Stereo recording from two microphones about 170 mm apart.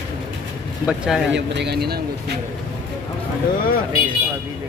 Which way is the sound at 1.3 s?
85° right.